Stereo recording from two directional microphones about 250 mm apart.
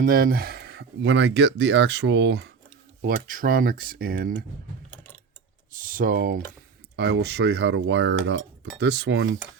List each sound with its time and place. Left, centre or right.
0.0 s speech: right
3.0 s speech: right
5.7 s speech: right